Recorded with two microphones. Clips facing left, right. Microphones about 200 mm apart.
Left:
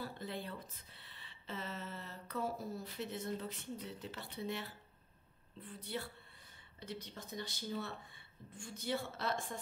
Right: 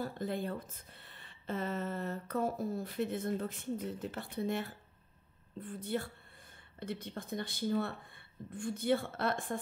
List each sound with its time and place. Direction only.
0.0 s speech: 50° right (ahead or behind)